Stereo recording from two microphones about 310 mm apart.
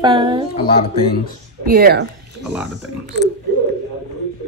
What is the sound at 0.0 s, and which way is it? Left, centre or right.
Speech, centre.